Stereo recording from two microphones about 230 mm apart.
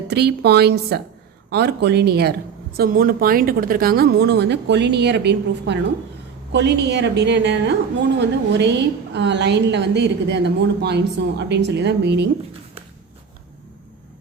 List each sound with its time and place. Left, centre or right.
0.1 s a woman's voice: right